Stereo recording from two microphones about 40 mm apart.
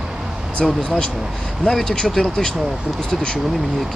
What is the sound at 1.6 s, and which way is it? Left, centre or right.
Speech, centre.